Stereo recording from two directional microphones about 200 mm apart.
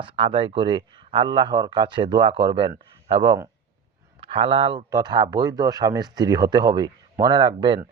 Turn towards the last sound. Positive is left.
turn(degrees=-25)  # may be behind; listen again after turning